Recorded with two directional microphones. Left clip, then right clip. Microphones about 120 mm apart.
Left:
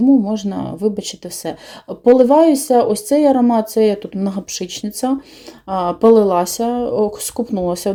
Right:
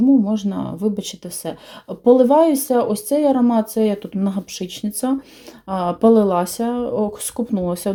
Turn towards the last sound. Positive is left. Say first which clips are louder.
# left 3 dB
turn(degrees=25)  # may be behind; listen again after turning